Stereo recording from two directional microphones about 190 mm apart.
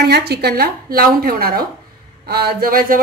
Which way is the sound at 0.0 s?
60° right (ahead or behind).